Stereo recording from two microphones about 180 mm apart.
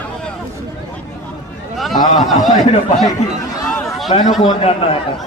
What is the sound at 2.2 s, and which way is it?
Speech, centre (ahead or behind).